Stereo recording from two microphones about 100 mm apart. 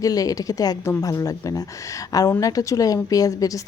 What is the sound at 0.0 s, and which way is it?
A woman's voice, 35° left (ahead or behind).